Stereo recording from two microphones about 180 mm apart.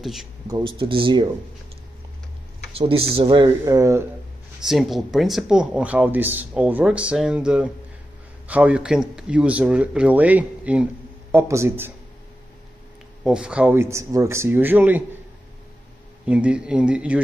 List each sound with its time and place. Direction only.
0.0 s speech: centre (ahead or behind)
0.5 s speech: 25° right (ahead or behind)
2.7 s speech: 30° right (ahead or behind)
3.6 s speech: 15° right (ahead or behind)
4.6 s speech: centre (ahead or behind)
13.2 s speech: 5° right (ahead or behind)
16.3 s speech: 5° right (ahead or behind)